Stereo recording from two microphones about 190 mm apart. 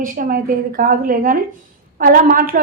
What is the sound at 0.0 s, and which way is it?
A woman's voice, 45° right (ahead or behind).